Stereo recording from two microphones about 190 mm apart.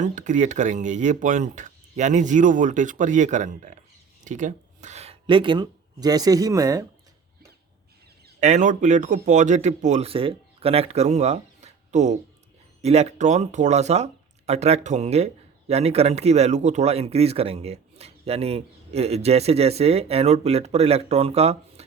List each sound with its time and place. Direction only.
0.0 s speech: 40° right (ahead or behind); by 6.8 s 20° right (ahead or behind)
8.4 s speech: 40° right (ahead or behind)